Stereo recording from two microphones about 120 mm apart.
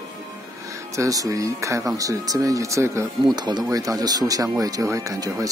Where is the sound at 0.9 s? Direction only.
30° right (ahead or behind).